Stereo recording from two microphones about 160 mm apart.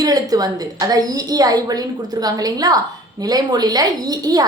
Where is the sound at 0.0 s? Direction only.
25° right (ahead or behind).